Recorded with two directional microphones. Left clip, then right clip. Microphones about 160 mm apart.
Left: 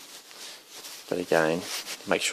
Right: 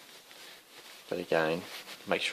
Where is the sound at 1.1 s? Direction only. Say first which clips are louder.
Left 5 dB; 40° left (ahead or behind).